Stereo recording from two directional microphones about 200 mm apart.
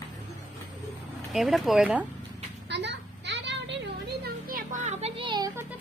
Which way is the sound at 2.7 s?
60° right (ahead or behind).